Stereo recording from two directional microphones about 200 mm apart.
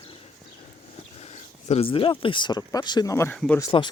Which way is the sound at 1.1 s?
35° left (ahead or behind).